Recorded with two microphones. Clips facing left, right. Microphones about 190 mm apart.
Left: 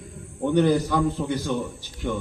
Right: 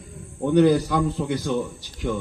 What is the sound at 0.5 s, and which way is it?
A man's voice, 15° right (ahead or behind).